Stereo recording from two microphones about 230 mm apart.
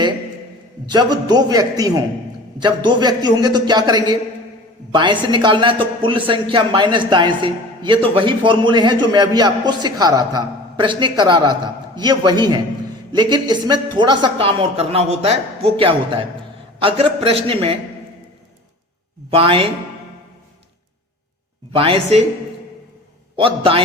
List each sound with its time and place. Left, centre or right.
0.9 s a man's voice: centre
19.3 s a man's voice: right
21.7 s a man's voice: right
23.4 s a man's voice: right